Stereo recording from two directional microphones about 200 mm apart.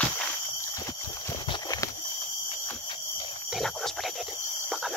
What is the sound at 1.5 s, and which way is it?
Horse, 20° left (ahead or behind).